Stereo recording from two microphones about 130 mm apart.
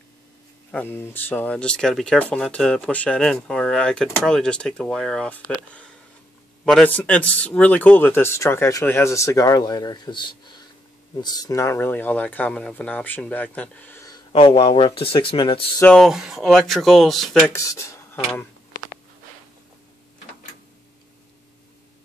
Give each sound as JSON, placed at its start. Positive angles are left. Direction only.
{"t": 0.7, "sound": "speech", "side_deg": 15}
{"t": 6.6, "sound": "speech", "side_deg": 5}
{"t": 14.3, "sound": "speech", "side_deg": 45}
{"t": 15.8, "sound": "speech", "side_deg": 5}
{"t": 17.5, "sound": "speech", "side_deg": 25}